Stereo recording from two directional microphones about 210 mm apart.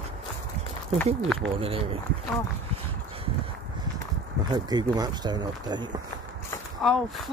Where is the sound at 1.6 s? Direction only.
25° right (ahead or behind).